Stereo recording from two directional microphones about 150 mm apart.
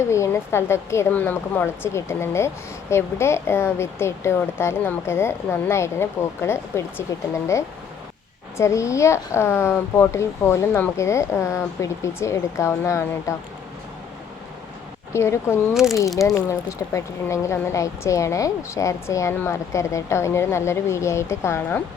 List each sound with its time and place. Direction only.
0.1 s speech: 20° left (ahead or behind)
8.5 s speech: 20° left (ahead or behind)
15.1 s speech: 20° left (ahead or behind)